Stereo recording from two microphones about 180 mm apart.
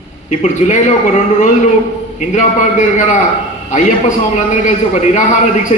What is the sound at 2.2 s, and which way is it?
A man's voice, 45° left (ahead or behind).